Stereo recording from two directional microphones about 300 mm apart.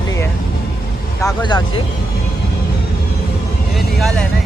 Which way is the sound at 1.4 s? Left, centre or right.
Centre.